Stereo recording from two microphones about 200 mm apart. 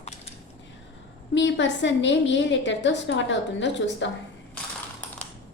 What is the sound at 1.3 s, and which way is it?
A woman's voice, 65° left (ahead or behind).